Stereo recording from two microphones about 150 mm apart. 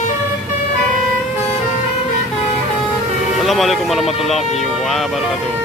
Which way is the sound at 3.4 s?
Centre (ahead or behind).